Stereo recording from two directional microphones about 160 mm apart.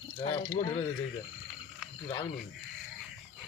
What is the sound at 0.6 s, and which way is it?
Speech, 45° left (ahead or behind).